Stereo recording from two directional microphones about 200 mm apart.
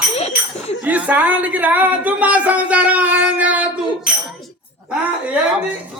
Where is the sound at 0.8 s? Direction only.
5° right (ahead or behind).